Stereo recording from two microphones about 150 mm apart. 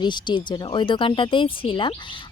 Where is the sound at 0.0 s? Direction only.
30° left (ahead or behind).